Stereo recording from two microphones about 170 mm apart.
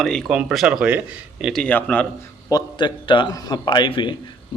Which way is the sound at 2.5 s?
25° left (ahead or behind).